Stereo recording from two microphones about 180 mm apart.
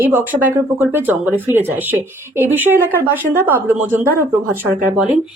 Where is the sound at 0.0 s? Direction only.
10° right (ahead or behind).